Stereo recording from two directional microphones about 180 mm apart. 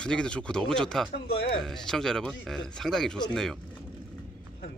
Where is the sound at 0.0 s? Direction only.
5° left (ahead or behind).